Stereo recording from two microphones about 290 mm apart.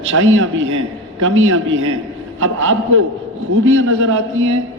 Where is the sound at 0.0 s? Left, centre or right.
Right.